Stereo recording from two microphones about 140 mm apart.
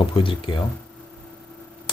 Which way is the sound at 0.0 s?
40° left (ahead or behind).